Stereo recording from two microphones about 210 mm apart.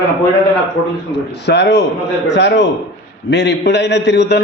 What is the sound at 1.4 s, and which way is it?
A man's voice, 55° left (ahead or behind).